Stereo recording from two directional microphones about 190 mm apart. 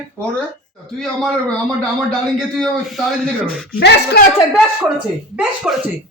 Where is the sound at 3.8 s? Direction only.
60° left (ahead or behind).